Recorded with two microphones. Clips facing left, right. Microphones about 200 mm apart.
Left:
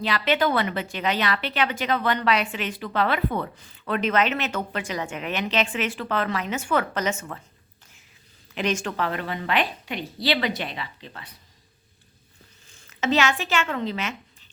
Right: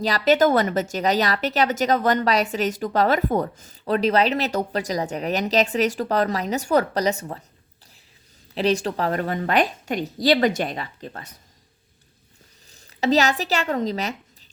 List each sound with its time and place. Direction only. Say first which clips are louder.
0.0 s speech: right 5 dB; 40° right (ahead or behind)
8.5 s a woman's voice: right 4 dB; 35° right (ahead or behind)
12.6 s speech: right 4 dB; 35° right (ahead or behind)